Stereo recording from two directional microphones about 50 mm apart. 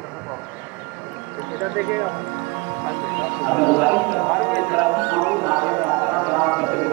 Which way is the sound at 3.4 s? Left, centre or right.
Right.